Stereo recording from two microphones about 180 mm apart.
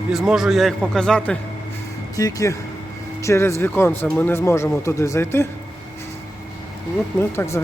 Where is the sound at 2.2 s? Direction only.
20° left (ahead or behind).